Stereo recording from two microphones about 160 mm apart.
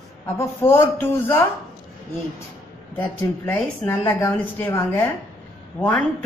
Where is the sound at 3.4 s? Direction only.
10° left (ahead or behind).